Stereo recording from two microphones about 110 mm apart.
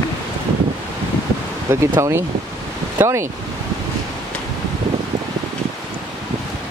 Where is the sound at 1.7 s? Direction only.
25° right (ahead or behind).